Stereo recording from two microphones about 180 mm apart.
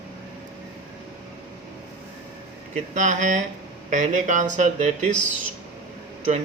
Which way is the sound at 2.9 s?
40° right (ahead or behind).